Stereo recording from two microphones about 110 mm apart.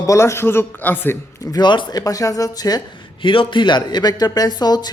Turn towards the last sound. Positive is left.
turn(degrees=40)  # may be behind; listen again after turning